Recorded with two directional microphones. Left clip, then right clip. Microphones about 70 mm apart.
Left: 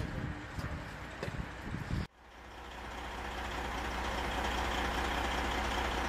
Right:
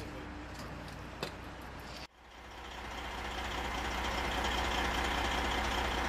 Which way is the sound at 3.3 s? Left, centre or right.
Centre.